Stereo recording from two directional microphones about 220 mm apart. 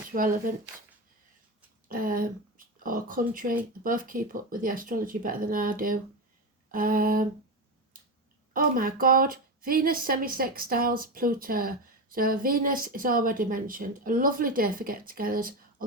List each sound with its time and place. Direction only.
0.1 s speech: 40° right (ahead or behind)
1.9 s speech: 40° right (ahead or behind)
8.5 s speech: 40° right (ahead or behind)